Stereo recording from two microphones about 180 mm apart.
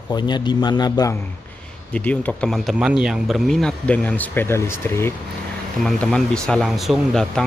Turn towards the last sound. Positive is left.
turn(degrees=0)  # may be behind; listen again after turning